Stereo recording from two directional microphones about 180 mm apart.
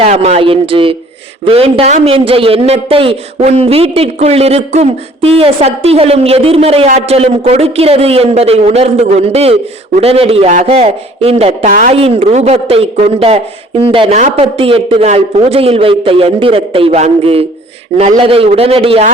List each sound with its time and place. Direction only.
0.0 s a man's voice: 35° right (ahead or behind)
11.9 s a man's voice: 35° right (ahead or behind)